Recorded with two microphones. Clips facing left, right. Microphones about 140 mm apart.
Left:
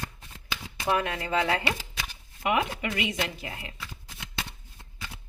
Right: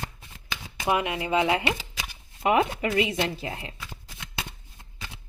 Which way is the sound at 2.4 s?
35° right (ahead or behind).